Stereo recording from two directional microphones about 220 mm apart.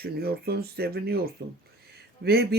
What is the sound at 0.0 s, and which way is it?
Speech, 45° right (ahead or behind).